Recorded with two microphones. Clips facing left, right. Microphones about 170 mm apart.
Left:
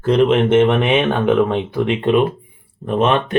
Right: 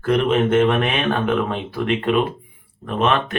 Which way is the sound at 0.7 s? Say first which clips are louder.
Left 4 dB; centre (ahead or behind).